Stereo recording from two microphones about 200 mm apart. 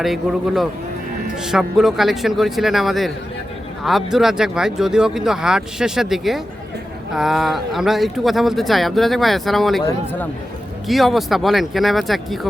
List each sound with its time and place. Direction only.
0.0 s speech: centre (ahead or behind)
9.8 s speech: 10° left (ahead or behind)
10.8 s speech: centre (ahead or behind)